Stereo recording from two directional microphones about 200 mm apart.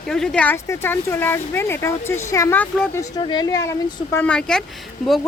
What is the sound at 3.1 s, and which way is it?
Speech, 20° left (ahead or behind).